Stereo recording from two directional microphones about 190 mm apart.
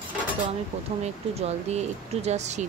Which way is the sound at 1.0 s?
35° right (ahead or behind).